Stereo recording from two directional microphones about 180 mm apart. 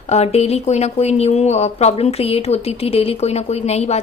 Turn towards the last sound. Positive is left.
turn(degrees=35)  # may be behind; listen again after turning